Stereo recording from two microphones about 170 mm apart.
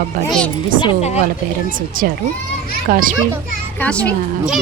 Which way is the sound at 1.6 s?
55° right (ahead or behind).